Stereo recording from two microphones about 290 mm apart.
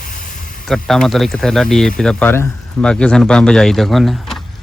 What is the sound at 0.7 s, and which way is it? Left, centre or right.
Speech, centre.